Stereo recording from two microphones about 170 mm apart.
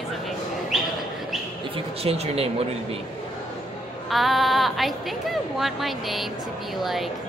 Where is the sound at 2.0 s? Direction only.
35° right (ahead or behind).